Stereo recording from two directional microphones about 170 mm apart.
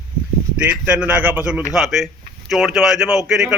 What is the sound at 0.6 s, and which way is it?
A man's voice, 10° right (ahead or behind).